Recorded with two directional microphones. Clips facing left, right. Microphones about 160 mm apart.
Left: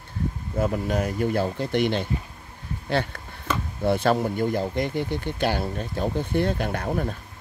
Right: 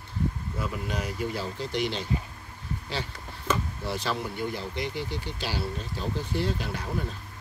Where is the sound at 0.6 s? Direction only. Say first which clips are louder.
Left 11 dB; 50° left (ahead or behind).